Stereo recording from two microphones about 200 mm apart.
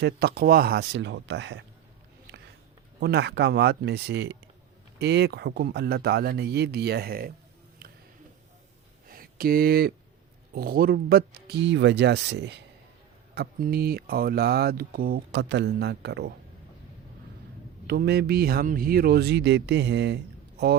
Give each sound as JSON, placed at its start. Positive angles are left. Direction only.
{"t": 0.0, "sound": "speech", "side_deg": -50}
{"t": 3.0, "sound": "speech", "side_deg": -55}
{"t": 9.0, "sound": "a sound", "side_deg": -45}
{"t": 10.5, "sound": "speech", "side_deg": -50}
{"t": 17.8, "sound": "speech", "side_deg": -55}